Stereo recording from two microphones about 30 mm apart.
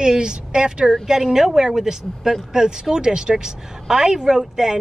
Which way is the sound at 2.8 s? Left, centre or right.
Right.